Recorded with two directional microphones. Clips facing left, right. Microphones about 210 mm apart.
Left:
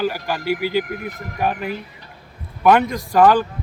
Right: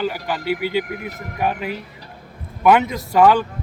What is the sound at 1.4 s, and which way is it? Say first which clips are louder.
Speech: even; centre (ahead or behind).